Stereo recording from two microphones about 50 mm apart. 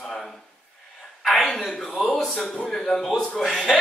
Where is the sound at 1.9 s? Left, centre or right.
Centre.